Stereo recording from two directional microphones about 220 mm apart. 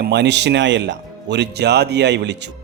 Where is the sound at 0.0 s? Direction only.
50° right (ahead or behind).